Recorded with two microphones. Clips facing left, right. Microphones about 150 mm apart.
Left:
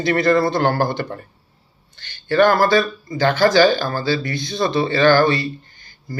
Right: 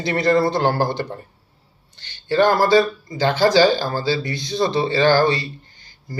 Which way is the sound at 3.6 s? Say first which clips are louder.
Left 1 dB; 55° left (ahead or behind).